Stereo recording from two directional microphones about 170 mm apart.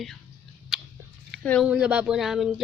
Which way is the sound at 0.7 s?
5° right (ahead or behind).